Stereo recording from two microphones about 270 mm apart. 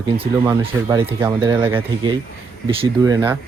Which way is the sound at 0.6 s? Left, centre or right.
Centre.